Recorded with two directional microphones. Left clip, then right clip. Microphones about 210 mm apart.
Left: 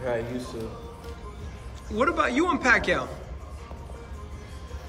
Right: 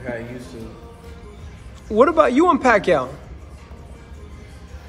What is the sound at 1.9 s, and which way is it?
A man's voice, 5° right (ahead or behind).